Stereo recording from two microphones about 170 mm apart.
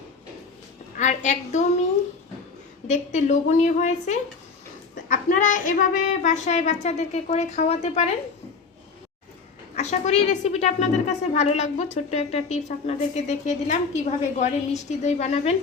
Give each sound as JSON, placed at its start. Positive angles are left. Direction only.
{"t": 0.9, "sound": "speech", "side_deg": 45}
{"t": 2.8, "sound": "speech", "side_deg": 45}
{"t": 9.7, "sound": "a woman's voice", "side_deg": 45}